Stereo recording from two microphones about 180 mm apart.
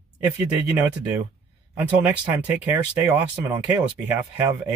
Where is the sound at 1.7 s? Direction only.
10° right (ahead or behind).